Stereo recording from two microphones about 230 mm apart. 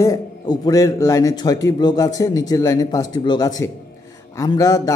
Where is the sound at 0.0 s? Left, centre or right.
Centre.